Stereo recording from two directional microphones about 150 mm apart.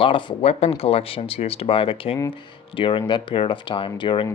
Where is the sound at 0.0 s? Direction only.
35° left (ahead or behind).